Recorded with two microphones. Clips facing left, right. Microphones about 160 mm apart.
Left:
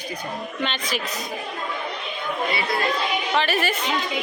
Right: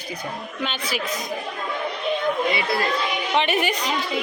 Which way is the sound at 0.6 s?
10° right (ahead or behind).